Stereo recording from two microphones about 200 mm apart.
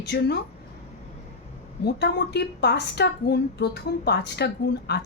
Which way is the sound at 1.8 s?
55° left (ahead or behind).